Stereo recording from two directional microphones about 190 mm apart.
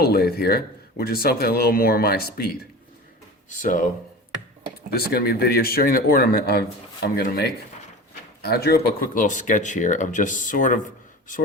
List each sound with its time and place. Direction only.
0.0 s speech: 55° left (ahead or behind)
3.6 s speech: 45° left (ahead or behind)
4.9 s speech: 55° left (ahead or behind)